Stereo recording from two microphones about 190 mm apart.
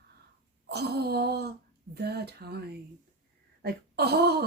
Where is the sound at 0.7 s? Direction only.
60° right (ahead or behind).